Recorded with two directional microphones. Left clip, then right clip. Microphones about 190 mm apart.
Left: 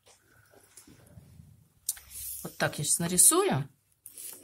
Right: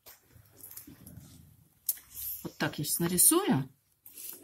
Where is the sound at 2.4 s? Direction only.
50° left (ahead or behind).